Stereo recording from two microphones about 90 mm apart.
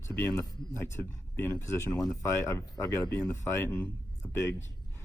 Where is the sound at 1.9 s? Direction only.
10° left (ahead or behind).